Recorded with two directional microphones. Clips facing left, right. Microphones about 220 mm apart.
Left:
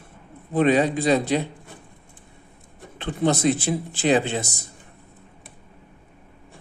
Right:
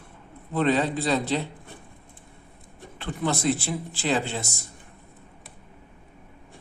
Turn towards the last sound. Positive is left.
turn(degrees=20)  # may be behind; listen again after turning